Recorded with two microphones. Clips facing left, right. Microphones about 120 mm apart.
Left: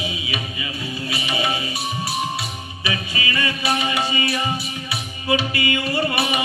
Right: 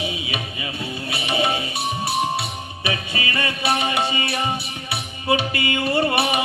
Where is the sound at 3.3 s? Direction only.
55° right (ahead or behind).